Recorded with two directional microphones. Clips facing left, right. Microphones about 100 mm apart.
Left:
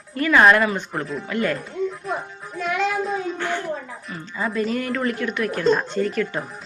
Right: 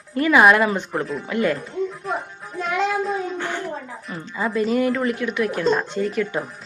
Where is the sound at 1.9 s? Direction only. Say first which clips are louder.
Right 1 dB; centre (ahead or behind).